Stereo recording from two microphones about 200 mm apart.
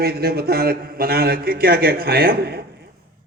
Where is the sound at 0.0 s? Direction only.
50° right (ahead or behind).